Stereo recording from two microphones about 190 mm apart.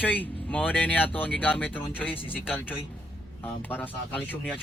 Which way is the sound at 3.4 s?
10° left (ahead or behind).